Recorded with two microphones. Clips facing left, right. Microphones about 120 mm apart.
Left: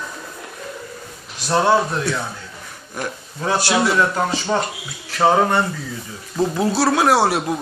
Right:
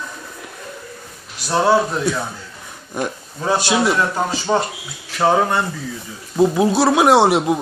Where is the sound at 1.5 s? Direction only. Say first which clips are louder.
Right 1 dB; 10° right (ahead or behind).